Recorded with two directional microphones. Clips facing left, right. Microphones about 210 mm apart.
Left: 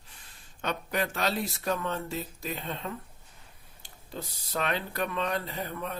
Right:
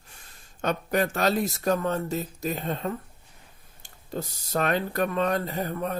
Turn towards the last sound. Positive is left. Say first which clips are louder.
# right 6 dB
turn(degrees=-45)  # may be behind; listen again after turning